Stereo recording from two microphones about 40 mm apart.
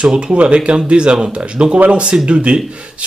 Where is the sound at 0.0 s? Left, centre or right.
Right.